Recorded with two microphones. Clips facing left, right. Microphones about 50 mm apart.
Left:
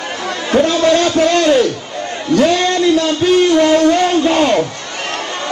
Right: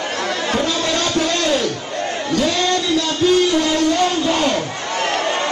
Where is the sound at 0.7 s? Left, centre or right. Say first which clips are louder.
Left 7 dB; left.